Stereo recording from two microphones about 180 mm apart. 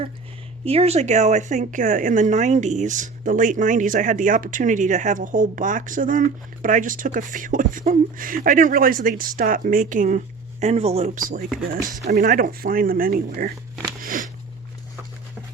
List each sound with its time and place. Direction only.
0.6 s speech: 35° right (ahead or behind)
10.6 s speech: 35° right (ahead or behind)
12.0 s speech: 60° right (ahead or behind)
14.0 s a sound: 50° right (ahead or behind)